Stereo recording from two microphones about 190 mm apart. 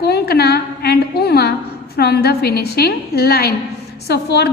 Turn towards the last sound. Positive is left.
turn(degrees=60)  # may be behind; listen again after turning